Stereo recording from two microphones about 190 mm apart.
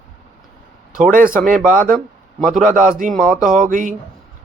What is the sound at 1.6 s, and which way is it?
A man's voice, 45° right (ahead or behind).